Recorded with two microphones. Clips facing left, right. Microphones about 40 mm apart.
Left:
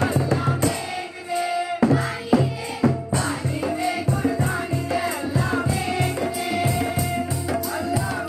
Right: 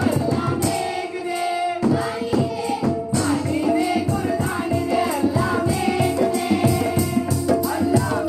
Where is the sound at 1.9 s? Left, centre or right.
Left.